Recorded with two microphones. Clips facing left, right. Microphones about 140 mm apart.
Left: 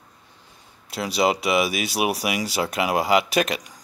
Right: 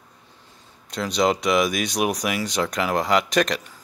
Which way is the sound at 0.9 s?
5° left (ahead or behind).